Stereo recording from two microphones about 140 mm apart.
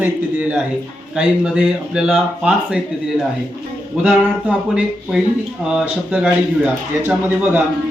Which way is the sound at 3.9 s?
10° right (ahead or behind).